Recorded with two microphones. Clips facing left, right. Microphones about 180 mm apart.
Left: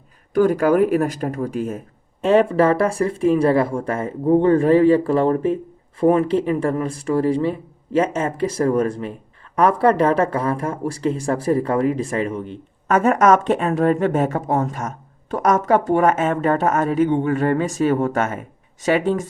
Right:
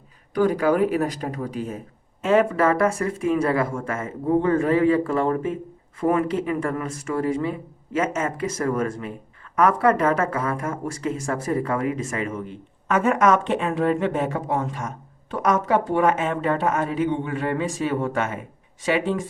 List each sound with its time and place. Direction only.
0.3 s speech: 50° left (ahead or behind)
2.2 s speech: 30° left (ahead or behind)